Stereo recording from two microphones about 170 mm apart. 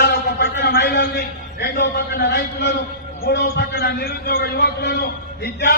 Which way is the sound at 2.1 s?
65° left (ahead or behind).